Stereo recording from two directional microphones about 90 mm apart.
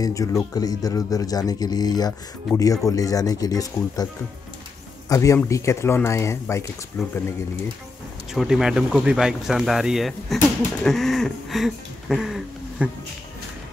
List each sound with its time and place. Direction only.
0.0 s a man's voice: 40° left (ahead or behind)
8.4 s speech: 5° right (ahead or behind)
10.8 s a sound: 5° left (ahead or behind)